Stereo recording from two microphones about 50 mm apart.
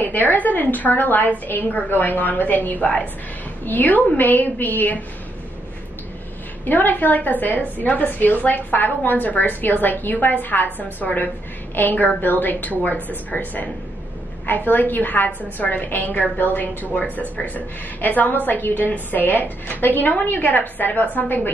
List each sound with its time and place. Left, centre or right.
0.0 s a woman's voice: left
6.6 s a woman's voice: left
16.9 s a woman's voice: left